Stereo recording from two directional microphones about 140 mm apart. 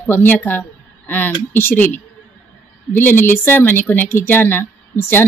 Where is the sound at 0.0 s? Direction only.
15° left (ahead or behind).